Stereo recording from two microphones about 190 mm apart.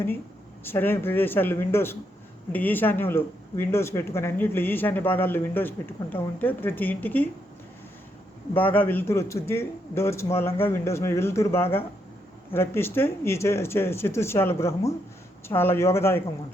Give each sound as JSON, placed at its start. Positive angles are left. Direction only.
{"t": 0.6, "sound": "speech", "side_deg": 10}
{"t": 8.5, "sound": "speech", "side_deg": 10}